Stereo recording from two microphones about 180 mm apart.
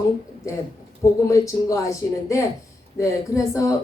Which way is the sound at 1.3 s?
15° left (ahead or behind).